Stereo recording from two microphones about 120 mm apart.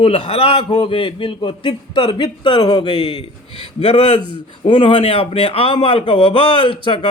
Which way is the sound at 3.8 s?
60° left (ahead or behind).